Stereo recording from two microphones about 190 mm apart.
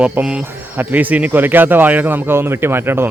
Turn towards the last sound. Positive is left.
turn(degrees=-10)  # may be behind; listen again after turning